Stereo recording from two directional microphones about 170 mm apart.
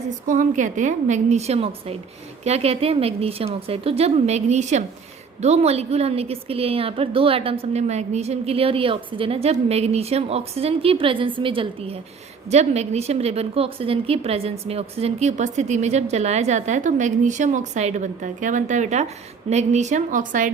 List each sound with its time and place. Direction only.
0.3 s a woman's voice: 50° right (ahead or behind)